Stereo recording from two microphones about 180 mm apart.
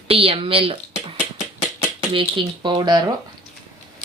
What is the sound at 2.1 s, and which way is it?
Speech, 30° right (ahead or behind).